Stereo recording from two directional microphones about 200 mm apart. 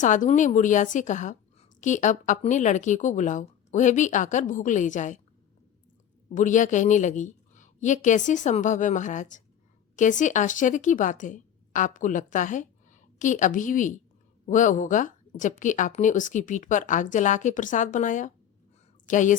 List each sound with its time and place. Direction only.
0.0 s a woman's voice: 40° left (ahead or behind)
6.2 s a woman's voice: 40° left (ahead or behind)